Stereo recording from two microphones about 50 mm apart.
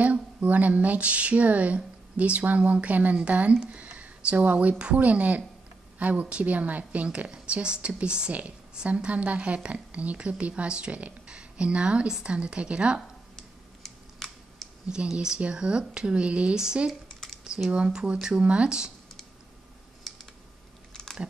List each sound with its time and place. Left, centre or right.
0.0 s a woman's voice: right
13.4 s a sound: centre
14.9 s a woman's voice: centre
17.1 s computer keyboard: centre
17.6 s a woman's voice: right
20.9 s a sound: centre